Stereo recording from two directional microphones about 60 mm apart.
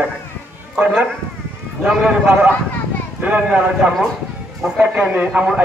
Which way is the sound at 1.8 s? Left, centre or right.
Centre.